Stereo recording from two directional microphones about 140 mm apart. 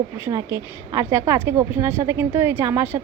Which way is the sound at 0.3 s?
20° right (ahead or behind).